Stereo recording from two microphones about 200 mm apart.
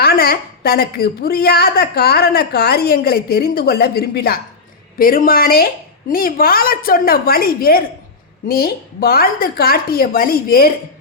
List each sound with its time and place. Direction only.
0.0 s a woman's voice: 50° left (ahead or behind)